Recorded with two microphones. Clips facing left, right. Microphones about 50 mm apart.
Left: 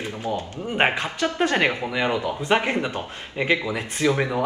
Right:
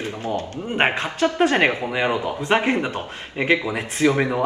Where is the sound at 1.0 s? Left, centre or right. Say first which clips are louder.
Right 4 dB; right.